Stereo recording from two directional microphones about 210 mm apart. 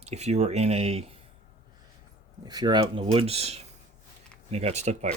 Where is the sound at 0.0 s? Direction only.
30° right (ahead or behind).